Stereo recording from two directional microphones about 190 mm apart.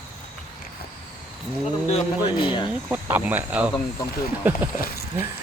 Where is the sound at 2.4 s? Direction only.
25° left (ahead or behind).